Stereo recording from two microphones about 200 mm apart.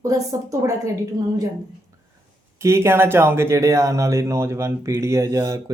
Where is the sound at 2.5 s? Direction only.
15° right (ahead or behind).